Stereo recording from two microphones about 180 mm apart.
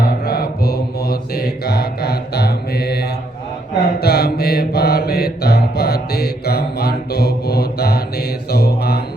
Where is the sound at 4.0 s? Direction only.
60° left (ahead or behind).